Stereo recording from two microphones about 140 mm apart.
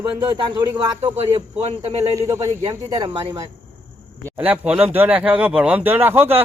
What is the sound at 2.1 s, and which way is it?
Speech, 25° right (ahead or behind).